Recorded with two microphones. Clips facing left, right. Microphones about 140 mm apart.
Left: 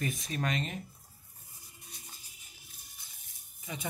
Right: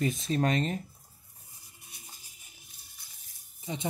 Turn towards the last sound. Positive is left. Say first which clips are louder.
# right 5 dB
turn(degrees=-25)  # may be behind; listen again after turning